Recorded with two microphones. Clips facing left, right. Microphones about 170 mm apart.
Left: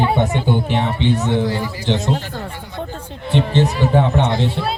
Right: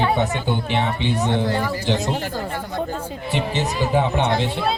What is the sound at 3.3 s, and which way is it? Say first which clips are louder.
Speech: left 7 dB; 5° right (ahead or behind).